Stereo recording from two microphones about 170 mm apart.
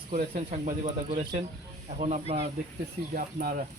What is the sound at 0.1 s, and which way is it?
Speech, 45° right (ahead or behind).